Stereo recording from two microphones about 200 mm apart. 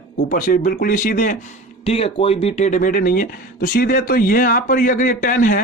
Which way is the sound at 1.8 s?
30° left (ahead or behind).